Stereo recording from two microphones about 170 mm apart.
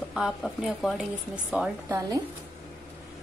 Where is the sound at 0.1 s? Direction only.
Centre (ahead or behind).